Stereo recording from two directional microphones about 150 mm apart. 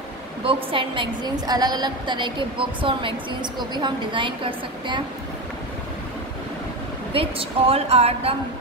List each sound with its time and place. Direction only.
0.4 s a woman's voice: 35° right (ahead or behind)
7.1 s a woman's voice: 40° right (ahead or behind)